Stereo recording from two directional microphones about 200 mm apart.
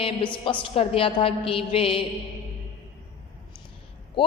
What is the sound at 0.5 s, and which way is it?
A woman's voice, 25° left (ahead or behind).